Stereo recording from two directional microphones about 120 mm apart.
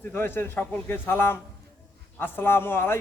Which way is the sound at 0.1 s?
20° left (ahead or behind).